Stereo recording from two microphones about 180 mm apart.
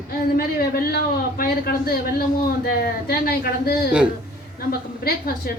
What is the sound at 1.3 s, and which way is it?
A man's voice, 55° left (ahead or behind).